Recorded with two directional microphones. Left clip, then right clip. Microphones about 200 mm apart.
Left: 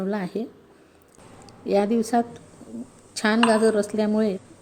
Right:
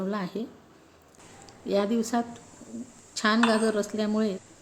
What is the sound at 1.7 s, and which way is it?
A woman's voice, 15° left (ahead or behind).